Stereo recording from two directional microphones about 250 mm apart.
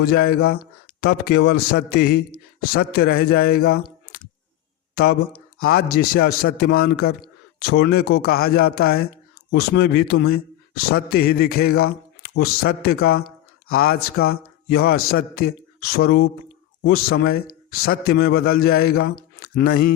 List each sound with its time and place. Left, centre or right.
0.0 s a man's voice: left